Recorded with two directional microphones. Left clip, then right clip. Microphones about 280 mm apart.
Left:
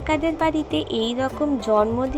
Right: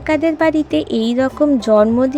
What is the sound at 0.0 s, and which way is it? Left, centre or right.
A woman's voice, right.